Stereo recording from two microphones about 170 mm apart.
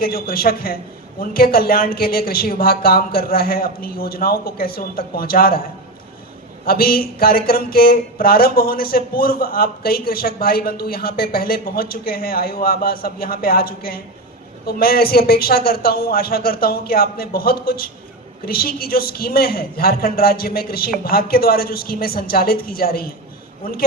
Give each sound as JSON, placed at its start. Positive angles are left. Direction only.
{"t": 0.0, "sound": "speech", "side_deg": 60}
{"t": 6.7, "sound": "speech", "side_deg": 60}